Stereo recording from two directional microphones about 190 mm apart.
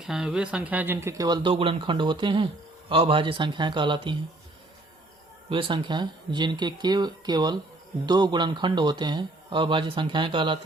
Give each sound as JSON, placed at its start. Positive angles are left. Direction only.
{"t": 0.0, "sound": "speech", "side_deg": -5}
{"t": 5.5, "sound": "speech", "side_deg": -25}